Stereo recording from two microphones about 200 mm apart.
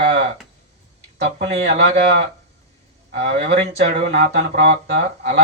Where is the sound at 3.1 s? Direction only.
55° right (ahead or behind).